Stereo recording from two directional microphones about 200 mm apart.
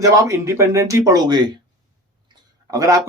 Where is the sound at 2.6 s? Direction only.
15° right (ahead or behind).